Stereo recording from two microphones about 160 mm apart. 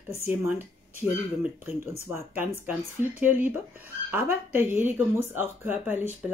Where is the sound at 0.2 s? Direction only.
15° right (ahead or behind).